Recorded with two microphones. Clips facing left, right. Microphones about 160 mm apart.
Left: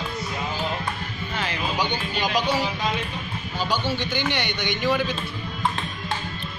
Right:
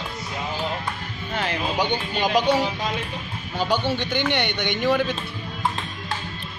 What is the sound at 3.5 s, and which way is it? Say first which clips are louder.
Speech: right 3 dB; 60° right (ahead or behind).